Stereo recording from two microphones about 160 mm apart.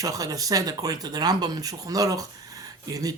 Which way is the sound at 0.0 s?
20° right (ahead or behind).